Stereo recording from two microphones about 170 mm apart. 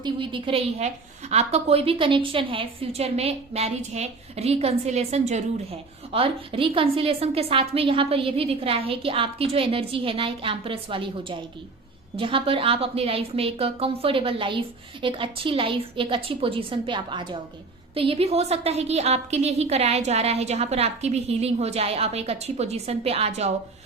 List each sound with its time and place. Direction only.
0.0 s a woman's voice: 30° right (ahead or behind)